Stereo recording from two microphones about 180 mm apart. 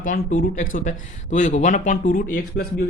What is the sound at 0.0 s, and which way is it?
Speech, 50° left (ahead or behind).